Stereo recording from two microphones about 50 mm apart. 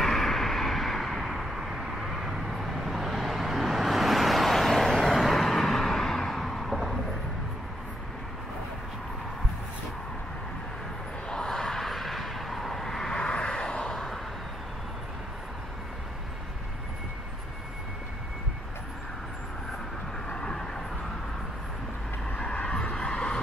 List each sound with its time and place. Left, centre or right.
0.0 s vehicle: centre
11.2 s vehicle: centre
13.9 s vehicle: centre
20.2 s vehicle: centre
22.4 s vehicle: left